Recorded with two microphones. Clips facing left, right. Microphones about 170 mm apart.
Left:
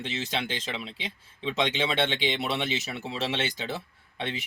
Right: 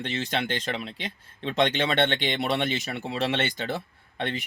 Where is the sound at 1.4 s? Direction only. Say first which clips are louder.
Right 3 dB; 55° right (ahead or behind).